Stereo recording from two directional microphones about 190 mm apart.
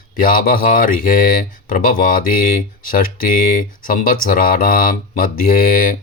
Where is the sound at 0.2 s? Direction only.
45° left (ahead or behind).